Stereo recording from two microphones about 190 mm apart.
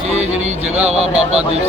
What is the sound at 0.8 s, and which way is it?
Speech, 35° right (ahead or behind).